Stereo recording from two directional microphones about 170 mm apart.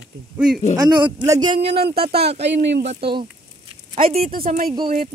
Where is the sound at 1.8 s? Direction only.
70° right (ahead or behind).